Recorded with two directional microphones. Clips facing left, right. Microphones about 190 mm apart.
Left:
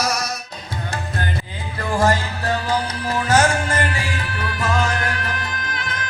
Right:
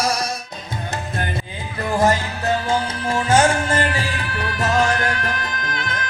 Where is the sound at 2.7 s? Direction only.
25° right (ahead or behind).